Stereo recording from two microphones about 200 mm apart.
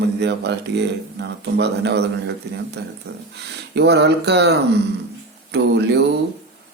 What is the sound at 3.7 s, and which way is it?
Speech, 55° right (ahead or behind).